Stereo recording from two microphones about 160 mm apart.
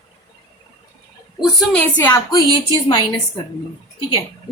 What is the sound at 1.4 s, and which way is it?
A woman's voice, 5° left (ahead or behind).